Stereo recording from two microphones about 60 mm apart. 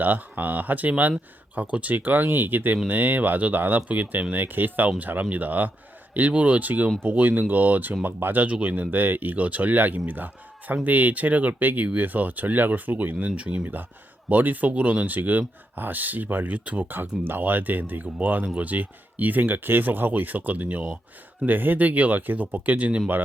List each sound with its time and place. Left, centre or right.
0.0 s speech: right
21.4 s speech: right